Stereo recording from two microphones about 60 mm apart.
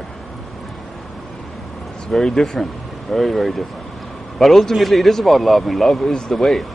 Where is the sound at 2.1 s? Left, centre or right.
Centre.